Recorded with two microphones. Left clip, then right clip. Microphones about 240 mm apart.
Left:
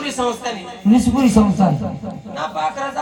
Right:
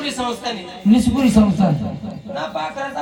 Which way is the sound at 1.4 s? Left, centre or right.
Left.